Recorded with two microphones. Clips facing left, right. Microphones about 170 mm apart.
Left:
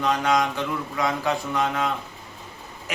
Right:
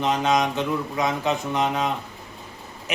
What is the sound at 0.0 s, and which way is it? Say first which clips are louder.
Speech: right 1 dB; 20° right (ahead or behind).